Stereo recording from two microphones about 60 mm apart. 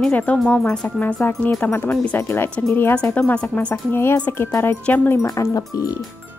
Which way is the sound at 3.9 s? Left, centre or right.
Left.